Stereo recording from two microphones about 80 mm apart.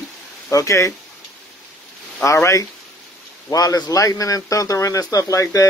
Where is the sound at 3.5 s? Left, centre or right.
Left.